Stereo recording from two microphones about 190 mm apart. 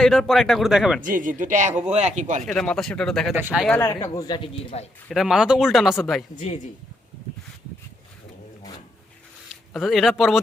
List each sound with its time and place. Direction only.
0.0 s speech: centre (ahead or behind)
1.0 s speech: 45° right (ahead or behind)
2.5 s speech: 5° left (ahead or behind)
3.7 s speech: 10° left (ahead or behind)
5.0 s speech: centre (ahead or behind)
9.7 s speech: centre (ahead or behind)